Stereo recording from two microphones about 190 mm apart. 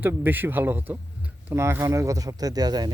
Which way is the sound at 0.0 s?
10° right (ahead or behind).